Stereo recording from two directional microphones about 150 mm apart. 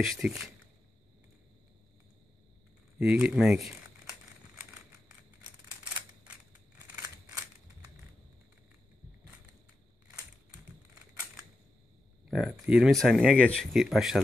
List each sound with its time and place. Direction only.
0.0 s speech: centre (ahead or behind)
3.0 s speech: 5° right (ahead or behind)
12.3 s speech: centre (ahead or behind)